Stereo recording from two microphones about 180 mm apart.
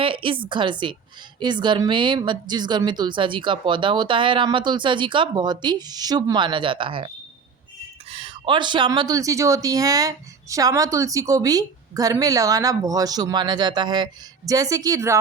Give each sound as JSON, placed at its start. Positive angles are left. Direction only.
{"t": 0.0, "sound": "a woman's voice", "side_deg": -30}
{"t": 8.1, "sound": "a woman's voice", "side_deg": -30}